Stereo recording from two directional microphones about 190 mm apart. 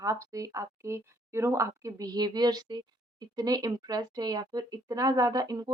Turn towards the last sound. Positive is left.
turn(degrees=-20)  # may be behind; listen again after turning